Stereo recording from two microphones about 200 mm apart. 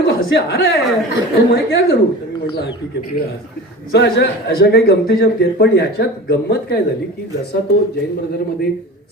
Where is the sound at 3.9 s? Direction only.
55° left (ahead or behind).